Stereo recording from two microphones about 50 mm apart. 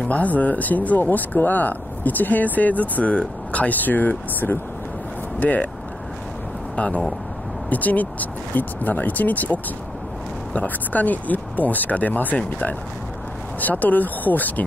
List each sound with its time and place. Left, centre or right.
0.0 s speech: left
6.7 s speech: left
13.6 s speech: left